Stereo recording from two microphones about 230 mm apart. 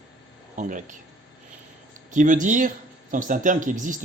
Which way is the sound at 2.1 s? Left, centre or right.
Right.